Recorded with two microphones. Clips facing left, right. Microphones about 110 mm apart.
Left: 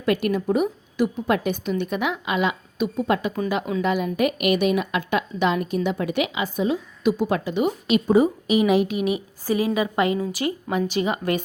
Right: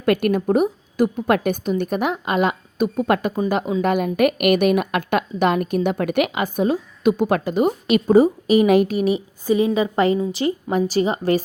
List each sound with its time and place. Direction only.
0.0 s a woman's voice: 55° right (ahead or behind)
7.5 s a woman's voice: 45° right (ahead or behind)